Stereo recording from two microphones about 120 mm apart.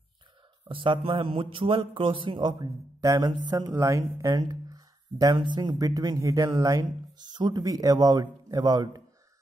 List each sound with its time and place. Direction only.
0.7 s a man's voice: 45° right (ahead or behind)